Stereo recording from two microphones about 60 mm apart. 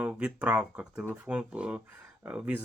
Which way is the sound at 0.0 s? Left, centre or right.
Centre.